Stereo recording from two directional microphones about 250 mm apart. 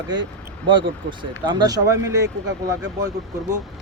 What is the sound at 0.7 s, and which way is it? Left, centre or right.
Speech, centre.